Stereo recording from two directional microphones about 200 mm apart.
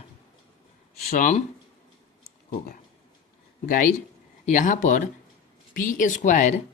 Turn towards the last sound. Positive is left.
turn(degrees=40)  # may be behind; listen again after turning